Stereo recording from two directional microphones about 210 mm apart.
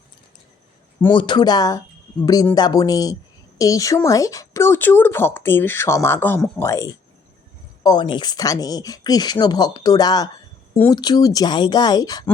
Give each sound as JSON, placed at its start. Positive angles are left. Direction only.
{"t": 1.1, "sound": "speech", "side_deg": 20}